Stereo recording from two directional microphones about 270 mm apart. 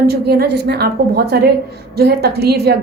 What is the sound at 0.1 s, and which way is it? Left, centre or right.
A woman's voice, right.